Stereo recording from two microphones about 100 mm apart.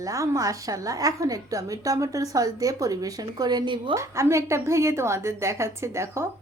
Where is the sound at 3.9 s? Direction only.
30° right (ahead or behind).